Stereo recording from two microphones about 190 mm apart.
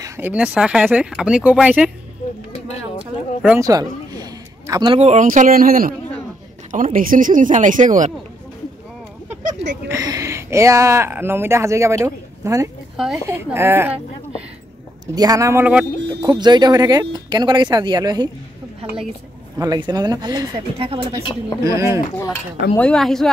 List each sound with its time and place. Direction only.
0.0 s speech: 10° right (ahead or behind)
3.4 s a sound: 15° right (ahead or behind)
4.9 s speech: 35° right (ahead or behind)
9.8 s speech: 15° right (ahead or behind)
12.9 s speech: centre (ahead or behind)
15.1 s speech: 20° right (ahead or behind)
16.1 s speech: 20° right (ahead or behind)
19.6 s speech: 20° right (ahead or behind)
21.2 s a woman's voice: 25° left (ahead or behind)
21.6 s speech: 15° right (ahead or behind)
22.8 s a woman's voice: 5° left (ahead or behind)